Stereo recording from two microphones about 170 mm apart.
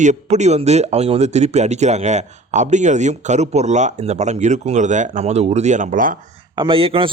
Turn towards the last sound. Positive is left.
turn(degrees=-30)  # may be behind; listen again after turning